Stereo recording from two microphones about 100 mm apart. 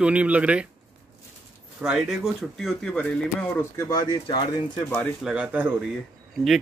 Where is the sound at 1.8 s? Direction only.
5° right (ahead or behind).